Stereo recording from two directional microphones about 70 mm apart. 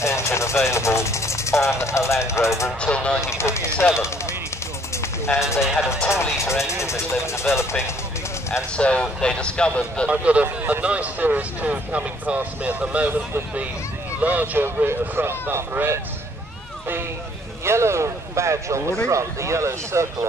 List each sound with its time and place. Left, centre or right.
0.0 s speech: left
2.8 s speech: centre
3.2 s speech: left
4.9 s a sound: left
5.9 s speech: left
8.7 s speech: centre
10.1 s speech: right
14.2 s speech: right
14.9 s speech: right
17.6 s speech: right